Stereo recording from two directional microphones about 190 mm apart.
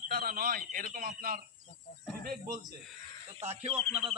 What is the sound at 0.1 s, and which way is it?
Speech, 50° right (ahead or behind).